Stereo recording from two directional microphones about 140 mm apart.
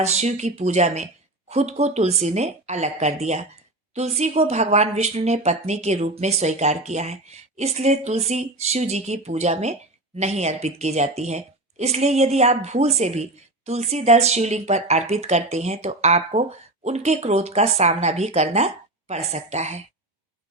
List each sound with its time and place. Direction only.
0.0 s speech: 55° right (ahead or behind)